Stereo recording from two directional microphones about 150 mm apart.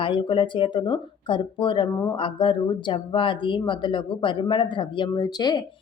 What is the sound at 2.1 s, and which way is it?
A woman's voice, 35° left (ahead or behind).